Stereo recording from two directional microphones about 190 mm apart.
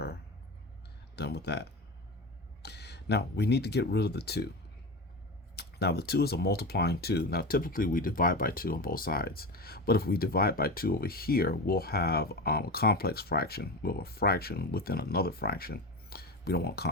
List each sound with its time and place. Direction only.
1.1 s speech: 60° left (ahead or behind)
2.6 s speech: 60° left (ahead or behind)
5.5 s speech: 55° left (ahead or behind)